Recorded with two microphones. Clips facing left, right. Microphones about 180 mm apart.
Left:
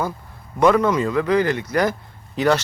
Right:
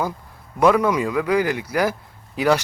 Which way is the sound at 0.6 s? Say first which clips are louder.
Left 1 dB; 10° right (ahead or behind).